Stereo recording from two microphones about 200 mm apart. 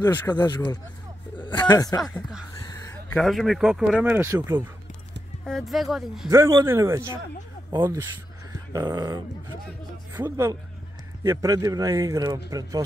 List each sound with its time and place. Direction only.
0.3 s speech: 20° left (ahead or behind)
2.0 s speech: centre (ahead or behind)
2.7 s a sound: 15° left (ahead or behind)
3.2 s speech: centre (ahead or behind)
5.4 s speech: centre (ahead or behind)
6.3 s speech: 15° right (ahead or behind)